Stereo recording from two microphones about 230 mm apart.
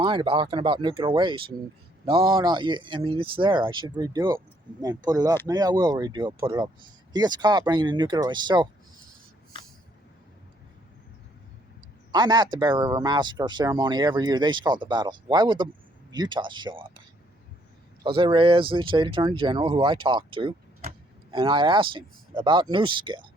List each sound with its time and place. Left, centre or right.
0.0 s speech: right
12.1 s speech: centre
18.0 s speech: right